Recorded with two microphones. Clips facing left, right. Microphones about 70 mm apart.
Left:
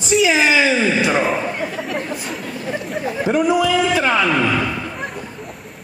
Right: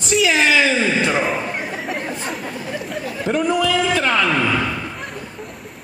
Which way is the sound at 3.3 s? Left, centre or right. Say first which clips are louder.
Left 2 dB; centre.